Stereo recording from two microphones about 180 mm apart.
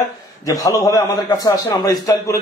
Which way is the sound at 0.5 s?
20° left (ahead or behind).